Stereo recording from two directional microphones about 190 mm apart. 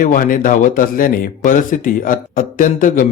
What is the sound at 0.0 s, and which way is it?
Speech, 45° left (ahead or behind).